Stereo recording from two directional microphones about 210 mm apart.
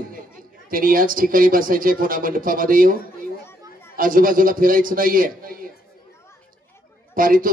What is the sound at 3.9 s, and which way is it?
Speech, 40° right (ahead or behind).